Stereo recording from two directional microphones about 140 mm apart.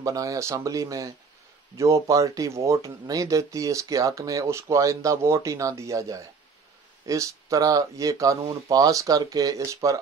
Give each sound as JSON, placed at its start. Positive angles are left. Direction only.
{"t": 0.0, "sound": "speech", "side_deg": -25}